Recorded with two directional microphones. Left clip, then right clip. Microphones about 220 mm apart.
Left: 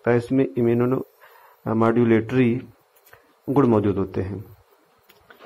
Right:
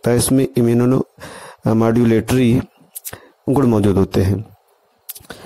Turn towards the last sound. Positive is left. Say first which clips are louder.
# right 9 dB
turn(degrees=-50)  # may be behind; listen again after turning